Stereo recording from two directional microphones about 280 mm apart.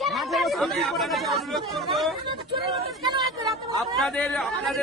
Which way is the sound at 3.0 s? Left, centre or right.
Centre.